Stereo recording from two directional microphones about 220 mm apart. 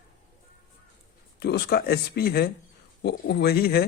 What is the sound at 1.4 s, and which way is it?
Speech, 45° left (ahead or behind).